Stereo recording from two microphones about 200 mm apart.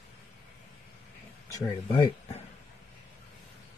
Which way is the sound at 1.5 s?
20° left (ahead or behind).